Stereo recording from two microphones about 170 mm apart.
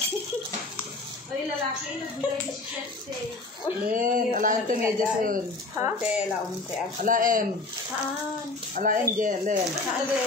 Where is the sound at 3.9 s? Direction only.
50° right (ahead or behind).